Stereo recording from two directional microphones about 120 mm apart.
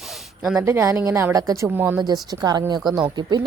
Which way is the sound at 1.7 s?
15° right (ahead or behind).